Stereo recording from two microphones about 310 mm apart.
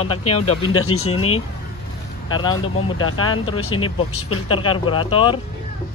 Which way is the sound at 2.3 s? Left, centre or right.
Centre.